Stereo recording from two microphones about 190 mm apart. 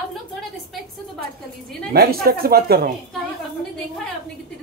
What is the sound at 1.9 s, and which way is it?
Speech, 55° right (ahead or behind).